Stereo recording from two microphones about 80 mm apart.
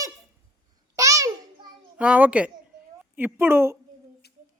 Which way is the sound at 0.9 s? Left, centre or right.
Right.